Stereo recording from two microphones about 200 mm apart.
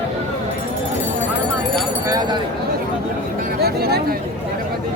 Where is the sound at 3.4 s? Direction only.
50° right (ahead or behind).